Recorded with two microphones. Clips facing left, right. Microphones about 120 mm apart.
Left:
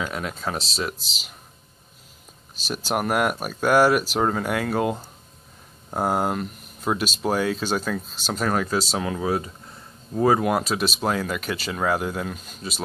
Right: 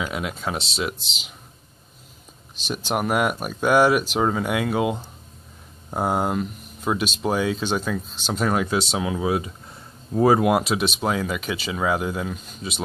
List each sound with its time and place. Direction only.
0.0 s speech: 10° right (ahead or behind)
2.6 s speech: 5° left (ahead or behind); by 9.5 s 10° right (ahead or behind)
10.1 s speech: 20° right (ahead or behind)
10.6 s speech: centre (ahead or behind)